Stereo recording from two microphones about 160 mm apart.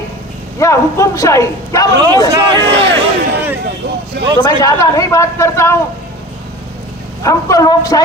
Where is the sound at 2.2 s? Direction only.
20° right (ahead or behind).